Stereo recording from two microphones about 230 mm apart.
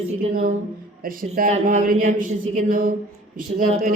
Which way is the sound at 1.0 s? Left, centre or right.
Right.